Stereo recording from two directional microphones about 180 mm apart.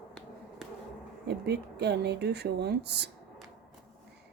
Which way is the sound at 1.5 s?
65° right (ahead or behind).